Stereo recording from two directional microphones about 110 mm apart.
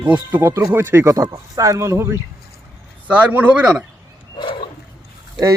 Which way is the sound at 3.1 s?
15° right (ahead or behind).